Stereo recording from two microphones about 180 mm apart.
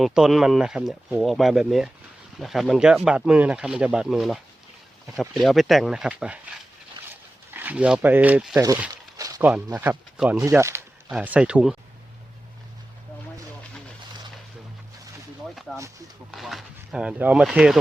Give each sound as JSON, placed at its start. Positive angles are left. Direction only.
{"t": 0.0, "sound": "speech", "side_deg": 0}
{"t": 7.5, "sound": "speech", "side_deg": -10}
{"t": 8.9, "sound": "a sound", "side_deg": -20}
{"t": 9.6, "sound": "speech", "side_deg": -10}
{"t": 15.7, "sound": "a sound", "side_deg": 0}
{"t": 16.3, "sound": "speech", "side_deg": 0}